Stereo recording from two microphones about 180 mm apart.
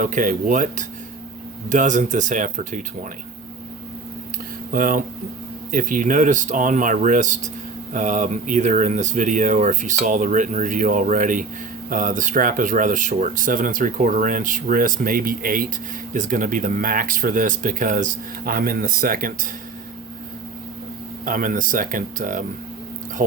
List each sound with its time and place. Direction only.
0.0 s speech: 45° right (ahead or behind)
4.7 s speech: 50° right (ahead or behind)
21.2 s speech: 50° right (ahead or behind)